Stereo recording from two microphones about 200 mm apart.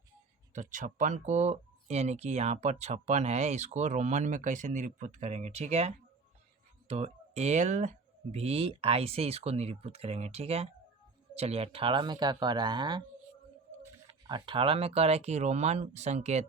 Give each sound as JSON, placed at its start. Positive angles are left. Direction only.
{"t": 0.5, "sound": "speech", "side_deg": -40}
{"t": 14.3, "sound": "speech", "side_deg": -25}